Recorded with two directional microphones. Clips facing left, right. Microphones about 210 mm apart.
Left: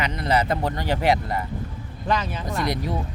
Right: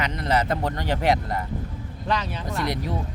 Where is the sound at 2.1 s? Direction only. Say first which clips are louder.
Left 2 dB; 45° left (ahead or behind).